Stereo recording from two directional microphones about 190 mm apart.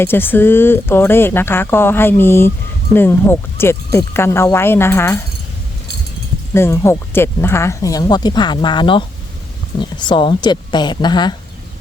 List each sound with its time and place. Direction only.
0.0 s speech: 10° left (ahead or behind)
6.5 s a woman's voice: 15° left (ahead or behind)